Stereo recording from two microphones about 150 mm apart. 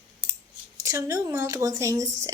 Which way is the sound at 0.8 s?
20° right (ahead or behind).